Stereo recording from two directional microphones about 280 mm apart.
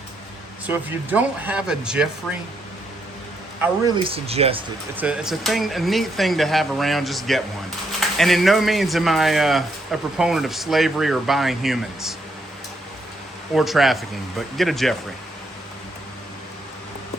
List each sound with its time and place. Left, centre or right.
0.7 s speech: centre
3.9 s speech: centre
4.9 s speech: centre
13.5 s speech: centre